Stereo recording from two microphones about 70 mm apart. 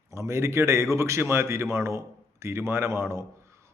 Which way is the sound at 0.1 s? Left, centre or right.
Right.